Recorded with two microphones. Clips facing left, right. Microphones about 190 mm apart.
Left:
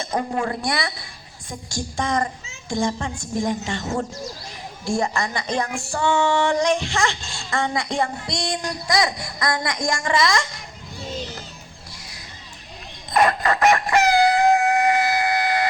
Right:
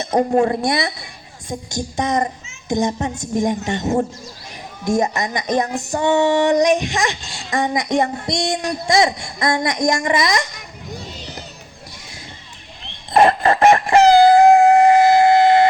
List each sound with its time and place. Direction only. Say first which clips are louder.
0.1 s a woman's voice: right 10 dB; 40° right (ahead or behind)
0.4 s speech: right 6 dB; 25° right (ahead or behind)
13.1 s a sound: right 5 dB; 30° right (ahead or behind)